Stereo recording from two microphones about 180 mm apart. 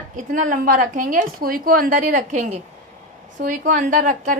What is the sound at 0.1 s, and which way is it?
A woman's voice, 45° right (ahead or behind).